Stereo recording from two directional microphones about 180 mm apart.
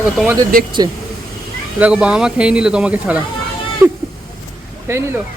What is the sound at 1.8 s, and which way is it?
Speech, 5° right (ahead or behind).